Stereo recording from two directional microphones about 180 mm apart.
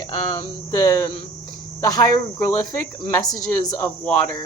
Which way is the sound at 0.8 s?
20° left (ahead or behind).